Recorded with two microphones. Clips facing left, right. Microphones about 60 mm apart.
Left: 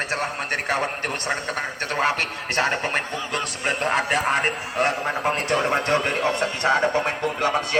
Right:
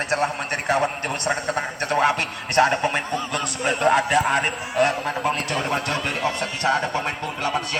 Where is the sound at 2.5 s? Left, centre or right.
Left.